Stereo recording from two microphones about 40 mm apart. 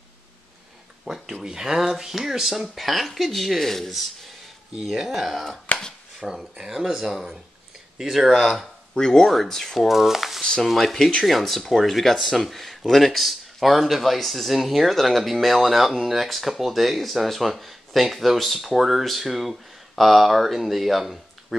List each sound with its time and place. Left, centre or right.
1.0 s speech: centre
4.8 s speech: centre
5.7 s a sound: left
6.1 s speech: centre
8.9 s speech: centre
9.8 s a sound: centre
10.6 s speech: centre